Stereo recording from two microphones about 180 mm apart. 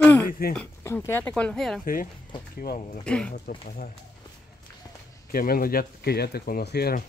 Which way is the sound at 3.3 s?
50° left (ahead or behind).